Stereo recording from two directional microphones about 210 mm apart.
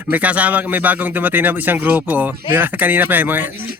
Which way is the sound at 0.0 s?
5° right (ahead or behind).